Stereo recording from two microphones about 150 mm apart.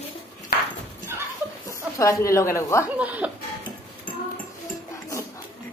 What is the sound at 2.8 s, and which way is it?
Speech, 10° right (ahead or behind).